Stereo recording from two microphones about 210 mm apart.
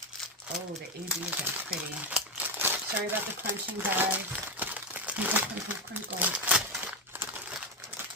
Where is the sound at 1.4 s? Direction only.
10° right (ahead or behind).